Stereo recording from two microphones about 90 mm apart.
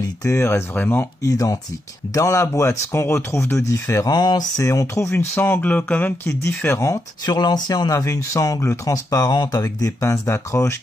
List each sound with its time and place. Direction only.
0.0 s speech: 35° left (ahead or behind)
1.2 s speech: 40° left (ahead or behind)
4.1 s speech: 50° left (ahead or behind)
5.1 s speech: 25° left (ahead or behind)
6.2 s speech: 30° left (ahead or behind)
7.2 s speech: 50° left (ahead or behind); by 10.8 s 30° left (ahead or behind)